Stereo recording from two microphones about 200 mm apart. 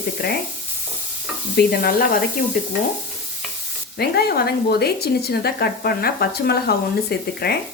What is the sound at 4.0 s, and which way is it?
A woman's voice, 50° left (ahead or behind).